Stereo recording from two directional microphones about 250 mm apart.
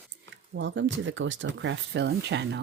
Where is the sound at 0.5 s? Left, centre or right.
Right.